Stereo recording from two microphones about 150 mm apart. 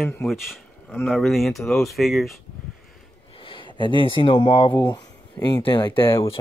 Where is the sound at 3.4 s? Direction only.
35° left (ahead or behind).